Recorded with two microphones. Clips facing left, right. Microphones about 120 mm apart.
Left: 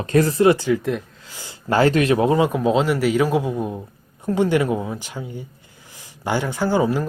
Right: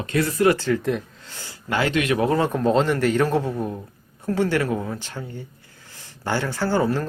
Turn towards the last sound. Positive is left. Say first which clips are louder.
# left 2 dB
turn(degrees=10)  # may be behind; listen again after turning